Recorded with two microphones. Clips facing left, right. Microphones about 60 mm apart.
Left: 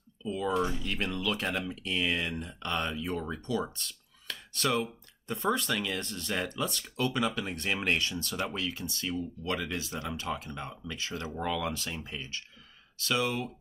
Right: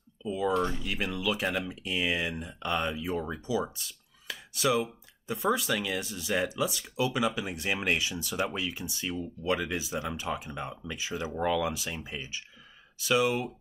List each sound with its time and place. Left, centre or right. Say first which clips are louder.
0.2 s speech: right 2 dB; centre